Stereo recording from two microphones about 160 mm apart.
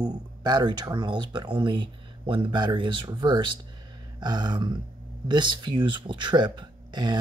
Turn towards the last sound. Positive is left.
turn(degrees=-30)  # may be behind; listen again after turning